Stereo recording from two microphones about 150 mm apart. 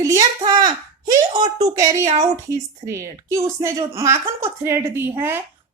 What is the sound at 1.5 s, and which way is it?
A woman's voice, 25° right (ahead or behind).